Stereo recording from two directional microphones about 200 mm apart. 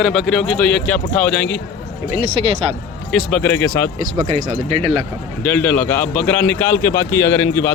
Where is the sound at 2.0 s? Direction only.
30° right (ahead or behind).